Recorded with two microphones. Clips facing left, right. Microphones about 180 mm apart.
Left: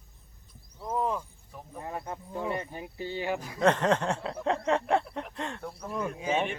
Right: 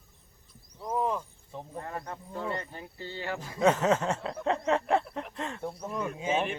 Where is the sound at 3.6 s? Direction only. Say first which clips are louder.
Right 1 dB; 5° right (ahead or behind).